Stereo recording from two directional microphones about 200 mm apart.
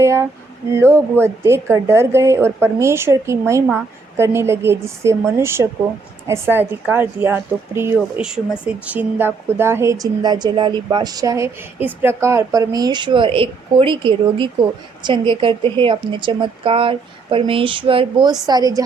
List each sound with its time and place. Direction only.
0.0 s a woman's voice: 15° right (ahead or behind)